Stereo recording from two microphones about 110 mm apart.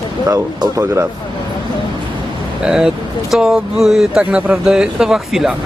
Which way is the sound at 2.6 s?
5° right (ahead or behind).